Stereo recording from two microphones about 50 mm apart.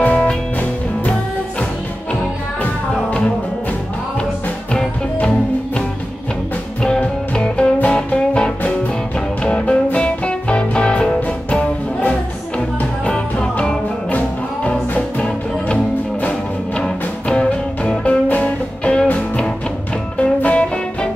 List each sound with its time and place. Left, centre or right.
0.0 s music: left
2.6 s music: left
6.8 s music: centre
20.2 s music: left